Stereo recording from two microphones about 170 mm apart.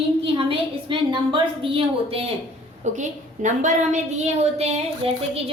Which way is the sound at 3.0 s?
45° right (ahead or behind).